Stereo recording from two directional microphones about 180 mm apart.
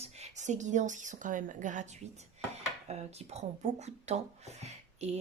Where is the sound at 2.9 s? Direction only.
40° right (ahead or behind).